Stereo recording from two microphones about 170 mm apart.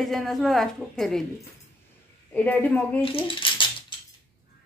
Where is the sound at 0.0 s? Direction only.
Centre (ahead or behind).